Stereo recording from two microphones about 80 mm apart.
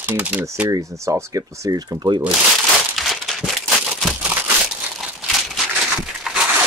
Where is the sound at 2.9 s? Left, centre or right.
Centre.